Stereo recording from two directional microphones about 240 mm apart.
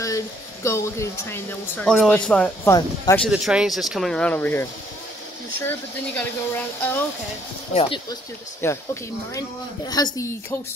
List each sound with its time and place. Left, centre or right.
0.7 s speech: centre
3.3 s speech: centre
5.7 s speech: centre
7.7 s speech: left
8.6 s speech: centre
9.8 s speech: centre